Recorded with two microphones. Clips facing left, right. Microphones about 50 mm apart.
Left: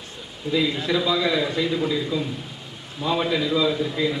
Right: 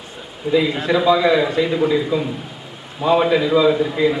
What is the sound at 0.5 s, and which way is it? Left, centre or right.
A man's voice, right.